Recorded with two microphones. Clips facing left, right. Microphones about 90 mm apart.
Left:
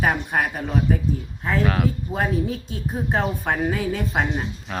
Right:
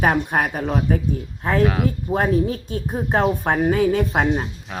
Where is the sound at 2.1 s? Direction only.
50° right (ahead or behind).